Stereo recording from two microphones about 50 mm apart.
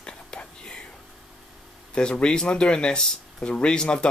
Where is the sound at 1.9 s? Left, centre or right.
Centre.